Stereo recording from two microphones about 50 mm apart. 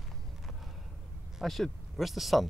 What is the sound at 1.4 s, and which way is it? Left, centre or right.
Speech, centre.